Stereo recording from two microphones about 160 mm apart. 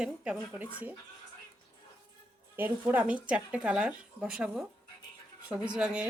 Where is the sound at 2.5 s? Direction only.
15° right (ahead or behind).